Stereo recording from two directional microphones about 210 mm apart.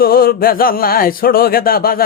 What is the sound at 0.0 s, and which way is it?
Speech, 45° left (ahead or behind).